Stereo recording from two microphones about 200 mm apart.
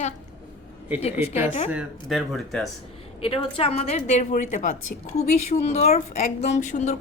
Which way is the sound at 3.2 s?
25° left (ahead or behind).